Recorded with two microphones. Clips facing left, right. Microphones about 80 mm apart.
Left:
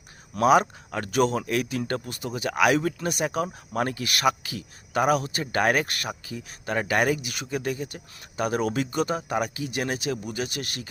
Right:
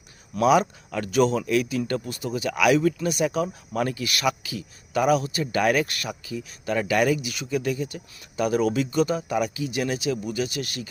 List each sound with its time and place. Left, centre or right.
0.3 s speech: left